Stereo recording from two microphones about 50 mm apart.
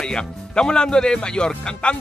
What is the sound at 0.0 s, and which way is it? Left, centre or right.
Speech, centre.